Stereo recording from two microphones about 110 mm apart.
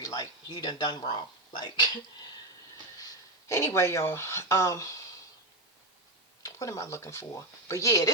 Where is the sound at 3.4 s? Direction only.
25° left (ahead or behind).